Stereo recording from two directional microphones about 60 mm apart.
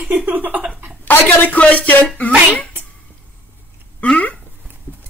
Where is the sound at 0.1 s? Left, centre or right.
Right.